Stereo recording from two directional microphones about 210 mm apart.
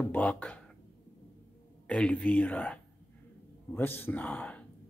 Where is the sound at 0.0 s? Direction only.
5° left (ahead or behind).